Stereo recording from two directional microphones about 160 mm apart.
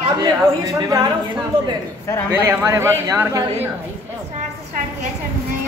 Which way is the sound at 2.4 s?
15° right (ahead or behind).